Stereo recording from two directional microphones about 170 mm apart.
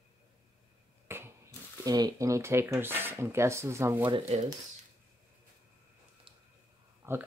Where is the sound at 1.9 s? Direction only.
20° right (ahead or behind).